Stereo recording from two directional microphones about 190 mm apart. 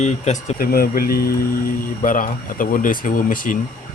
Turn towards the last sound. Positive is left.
turn(degrees=45)  # may be behind; listen again after turning